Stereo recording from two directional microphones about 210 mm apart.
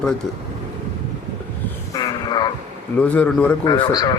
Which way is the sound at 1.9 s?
20° left (ahead or behind).